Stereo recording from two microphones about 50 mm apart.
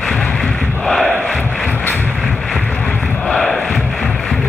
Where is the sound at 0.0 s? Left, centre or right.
Centre.